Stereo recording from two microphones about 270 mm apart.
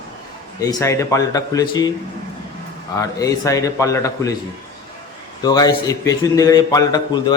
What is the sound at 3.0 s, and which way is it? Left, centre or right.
Speech, centre.